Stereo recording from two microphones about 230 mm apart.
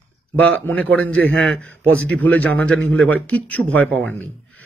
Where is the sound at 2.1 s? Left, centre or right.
Centre.